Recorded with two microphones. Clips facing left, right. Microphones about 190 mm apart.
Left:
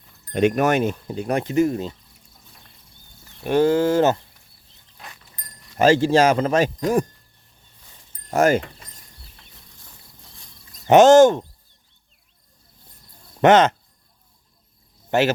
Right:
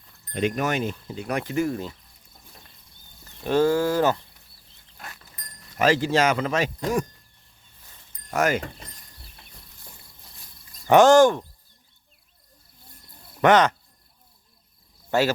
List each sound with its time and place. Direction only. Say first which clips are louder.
0.3 s speech: left 7 dB; 65° left (ahead or behind); by 1.3 s 50° left (ahead or behind)
1.3 s speech: left 5 dB; 25° left (ahead or behind)
3.4 s speech: left 3 dB; 15° left (ahead or behind)
5.7 s speech: left 5 dB; 30° left (ahead or behind)
8.3 s speech: left 6 dB; 35° left (ahead or behind)
10.8 s speech: left 4 dB; 20° left (ahead or behind)
13.4 s speech: left 4 dB; 25° left (ahead or behind)